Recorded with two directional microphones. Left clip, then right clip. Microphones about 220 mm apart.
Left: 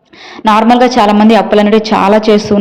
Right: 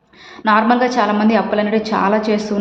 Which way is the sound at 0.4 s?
30° left (ahead or behind).